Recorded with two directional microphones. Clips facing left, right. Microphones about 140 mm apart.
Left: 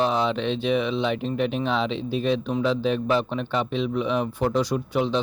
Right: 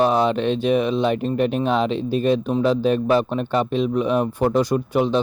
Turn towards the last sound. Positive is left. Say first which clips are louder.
# right 4 dB
turn(degrees=-50)  # may be behind; listen again after turning